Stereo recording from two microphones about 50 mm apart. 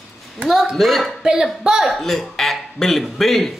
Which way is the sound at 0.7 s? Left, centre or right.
Centre.